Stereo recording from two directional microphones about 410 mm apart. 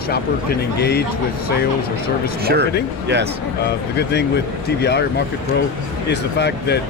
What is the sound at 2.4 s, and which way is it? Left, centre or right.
Speech, right.